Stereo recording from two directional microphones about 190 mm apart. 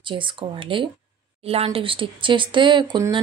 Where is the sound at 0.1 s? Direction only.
25° right (ahead or behind).